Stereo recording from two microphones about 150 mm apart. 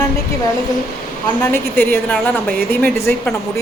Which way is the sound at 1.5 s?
15° left (ahead or behind).